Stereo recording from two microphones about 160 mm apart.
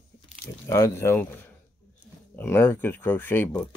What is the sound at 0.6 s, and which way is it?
Speech, 20° left (ahead or behind).